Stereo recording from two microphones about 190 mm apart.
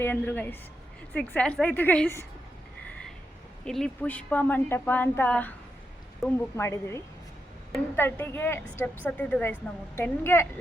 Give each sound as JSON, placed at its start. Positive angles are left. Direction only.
{"t": 0.0, "sound": "a woman's voice", "side_deg": 10}
{"t": 3.6, "sound": "a woman's voice", "side_deg": 5}